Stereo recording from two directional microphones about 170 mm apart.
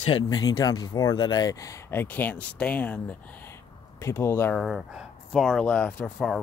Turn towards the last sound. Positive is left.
turn(degrees=0)  # may be behind; listen again after turning